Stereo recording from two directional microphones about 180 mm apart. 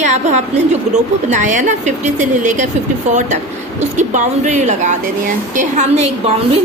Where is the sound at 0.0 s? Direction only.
40° right (ahead or behind).